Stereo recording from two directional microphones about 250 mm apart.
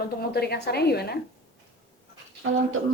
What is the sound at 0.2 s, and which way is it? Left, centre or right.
A woman's voice, left.